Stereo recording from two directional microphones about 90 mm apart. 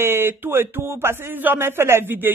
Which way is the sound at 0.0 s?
25° right (ahead or behind).